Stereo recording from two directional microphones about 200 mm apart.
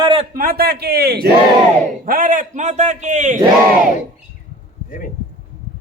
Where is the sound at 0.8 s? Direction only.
50° right (ahead or behind).